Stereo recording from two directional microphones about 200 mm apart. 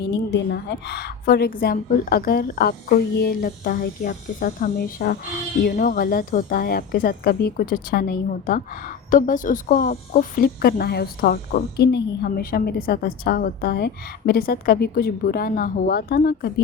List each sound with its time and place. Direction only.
0.1 s a woman's voice: 60° left (ahead or behind)